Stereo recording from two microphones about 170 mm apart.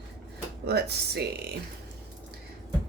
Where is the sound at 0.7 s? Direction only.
70° right (ahead or behind).